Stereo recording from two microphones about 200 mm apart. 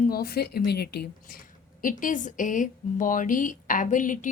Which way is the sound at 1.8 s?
40° left (ahead or behind).